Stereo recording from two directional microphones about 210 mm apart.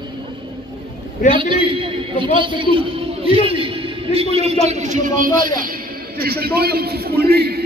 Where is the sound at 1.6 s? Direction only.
25° right (ahead or behind).